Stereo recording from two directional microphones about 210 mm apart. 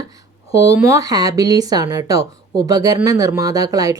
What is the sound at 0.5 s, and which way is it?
Speech, 15° right (ahead or behind).